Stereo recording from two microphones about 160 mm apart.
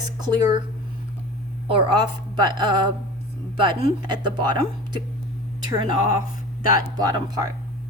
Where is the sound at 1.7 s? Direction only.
30° right (ahead or behind).